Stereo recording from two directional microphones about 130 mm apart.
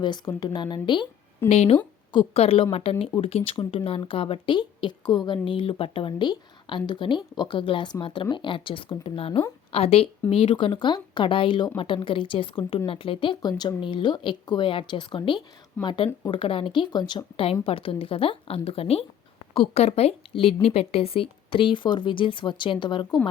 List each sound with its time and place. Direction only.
0.0 s a woman's voice: 35° left (ahead or behind)
1.5 s a woman's voice: 55° left (ahead or behind); by 23.0 s 40° left (ahead or behind)